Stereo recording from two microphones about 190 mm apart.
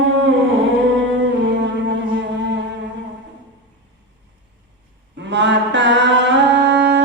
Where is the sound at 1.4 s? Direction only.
70° right (ahead or behind).